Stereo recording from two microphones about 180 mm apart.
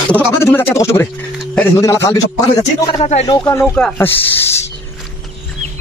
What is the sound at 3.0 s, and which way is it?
Speech, 35° left (ahead or behind).